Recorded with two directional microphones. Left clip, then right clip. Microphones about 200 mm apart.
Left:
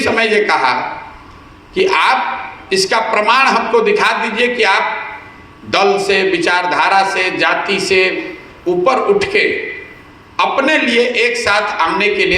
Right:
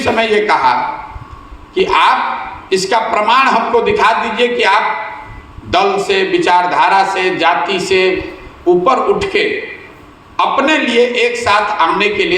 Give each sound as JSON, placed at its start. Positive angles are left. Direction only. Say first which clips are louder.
{"t": 0.0, "sound": "a man's voice", "louder": "even", "side_deg": 35}